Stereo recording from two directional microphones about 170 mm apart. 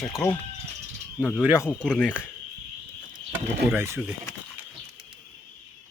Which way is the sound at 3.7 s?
15° right (ahead or behind).